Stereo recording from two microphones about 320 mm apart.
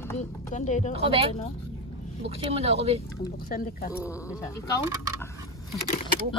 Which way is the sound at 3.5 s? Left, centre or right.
Left.